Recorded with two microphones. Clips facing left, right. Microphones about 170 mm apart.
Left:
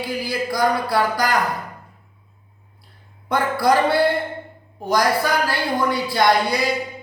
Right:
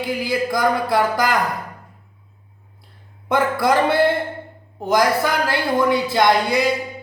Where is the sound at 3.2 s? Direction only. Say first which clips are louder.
Right 1 dB; 20° right (ahead or behind).